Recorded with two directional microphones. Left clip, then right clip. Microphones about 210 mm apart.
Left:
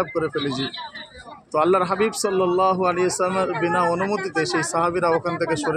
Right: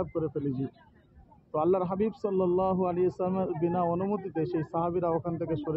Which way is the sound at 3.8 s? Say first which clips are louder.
Left 8 dB; 30° left (ahead or behind).